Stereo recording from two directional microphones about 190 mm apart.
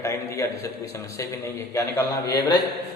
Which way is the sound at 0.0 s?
15° left (ahead or behind).